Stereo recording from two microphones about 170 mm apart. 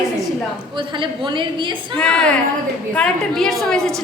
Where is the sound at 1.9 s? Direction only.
5° left (ahead or behind).